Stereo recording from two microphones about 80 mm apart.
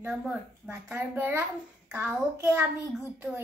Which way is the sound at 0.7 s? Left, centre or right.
Right.